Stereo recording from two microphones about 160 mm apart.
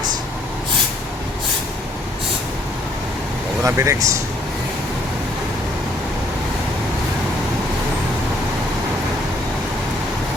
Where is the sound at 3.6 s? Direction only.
15° right (ahead or behind).